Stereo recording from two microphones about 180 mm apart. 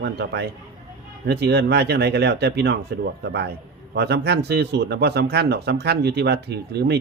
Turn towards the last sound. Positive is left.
turn(degrees=-65)  # may be behind; listen again after turning